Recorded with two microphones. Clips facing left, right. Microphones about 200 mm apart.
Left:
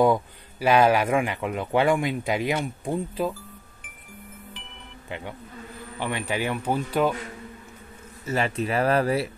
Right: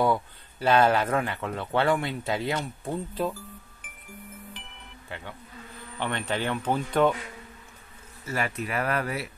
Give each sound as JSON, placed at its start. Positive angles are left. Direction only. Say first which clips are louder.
{"t": 0.0, "sound": "speech", "louder": "left 4 dB", "side_deg": 15}
{"t": 5.9, "sound": "speech", "louder": "left 1 dB", "side_deg": 10}
{"t": 8.3, "sound": "speech", "louder": "left 5 dB", "side_deg": 25}